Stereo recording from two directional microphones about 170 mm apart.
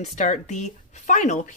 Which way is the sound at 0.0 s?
40° left (ahead or behind).